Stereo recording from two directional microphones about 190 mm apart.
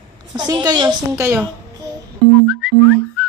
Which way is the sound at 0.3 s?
20° right (ahead or behind).